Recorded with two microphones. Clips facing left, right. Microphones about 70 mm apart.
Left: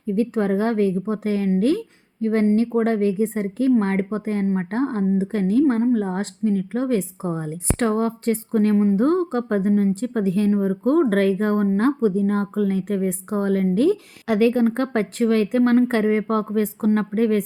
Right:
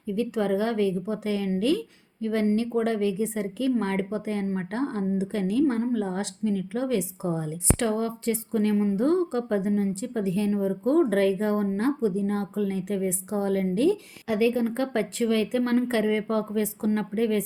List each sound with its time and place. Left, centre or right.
0.1 s a woman's voice: left
8.7 s speech: left